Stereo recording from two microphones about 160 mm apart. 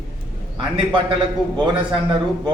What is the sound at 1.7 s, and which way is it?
Speech, 30° right (ahead or behind).